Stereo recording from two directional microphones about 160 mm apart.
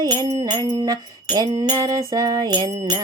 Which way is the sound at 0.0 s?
25° right (ahead or behind).